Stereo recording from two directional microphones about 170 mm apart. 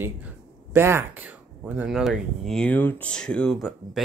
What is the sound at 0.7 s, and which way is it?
Speech, 15° right (ahead or behind).